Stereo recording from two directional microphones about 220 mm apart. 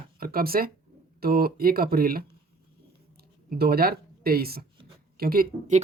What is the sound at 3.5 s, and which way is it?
Speech, 45° right (ahead or behind).